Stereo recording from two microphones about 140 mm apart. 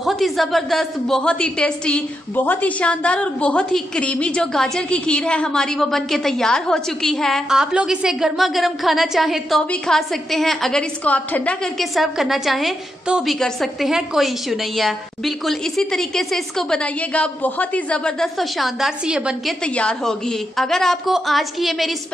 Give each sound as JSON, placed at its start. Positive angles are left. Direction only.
{"t": 0.0, "sound": "a woman's voice", "side_deg": 0}
{"t": 19.6, "sound": "a woman's voice", "side_deg": 5}